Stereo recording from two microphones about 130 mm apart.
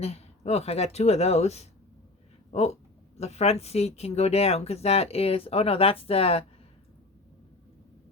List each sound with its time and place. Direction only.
0.0 s speech: 55° left (ahead or behind)